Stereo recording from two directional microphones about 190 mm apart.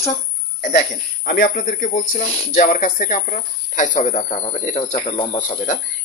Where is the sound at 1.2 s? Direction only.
50° left (ahead or behind); by 5.4 s 30° left (ahead or behind).